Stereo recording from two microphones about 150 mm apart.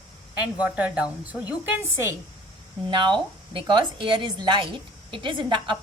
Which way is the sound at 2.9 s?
30° right (ahead or behind).